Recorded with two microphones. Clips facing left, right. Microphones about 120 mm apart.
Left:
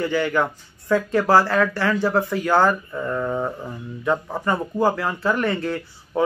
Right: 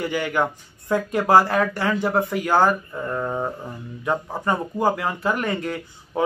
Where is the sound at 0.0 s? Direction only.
15° right (ahead or behind).